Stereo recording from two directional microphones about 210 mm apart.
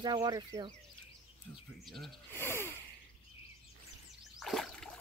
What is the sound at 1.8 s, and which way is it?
Speech, centre (ahead or behind).